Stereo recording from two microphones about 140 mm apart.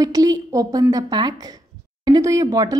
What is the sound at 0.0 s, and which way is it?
A woman's voice, 25° right (ahead or behind).